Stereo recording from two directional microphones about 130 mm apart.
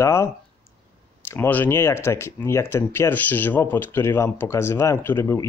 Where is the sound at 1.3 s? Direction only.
15° left (ahead or behind).